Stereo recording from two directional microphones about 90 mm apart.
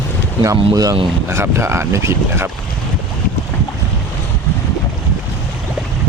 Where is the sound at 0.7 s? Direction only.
40° right (ahead or behind).